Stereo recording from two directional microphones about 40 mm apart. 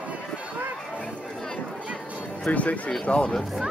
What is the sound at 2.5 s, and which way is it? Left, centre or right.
Speech, left.